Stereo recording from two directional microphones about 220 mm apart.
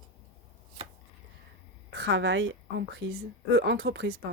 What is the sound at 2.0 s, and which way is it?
A woman's voice, 60° right (ahead or behind).